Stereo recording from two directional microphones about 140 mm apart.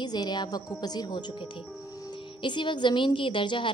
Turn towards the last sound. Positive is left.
turn(degrees=35)  # may be behind; listen again after turning